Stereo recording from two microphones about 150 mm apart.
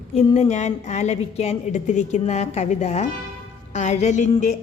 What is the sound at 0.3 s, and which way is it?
A woman's voice, 50° left (ahead or behind).